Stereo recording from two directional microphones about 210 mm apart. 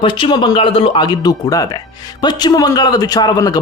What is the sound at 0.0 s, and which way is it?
Speech, 25° left (ahead or behind).